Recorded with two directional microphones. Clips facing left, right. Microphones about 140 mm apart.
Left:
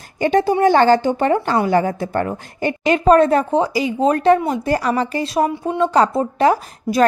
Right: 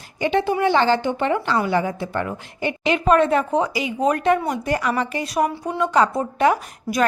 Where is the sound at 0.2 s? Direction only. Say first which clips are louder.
Left 5 dB; 40° left (ahead or behind).